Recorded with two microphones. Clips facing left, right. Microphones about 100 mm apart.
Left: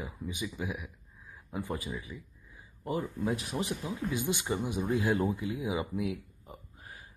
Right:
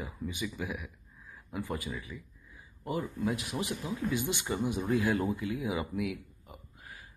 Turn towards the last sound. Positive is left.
turn(degrees=30)  # may be behind; listen again after turning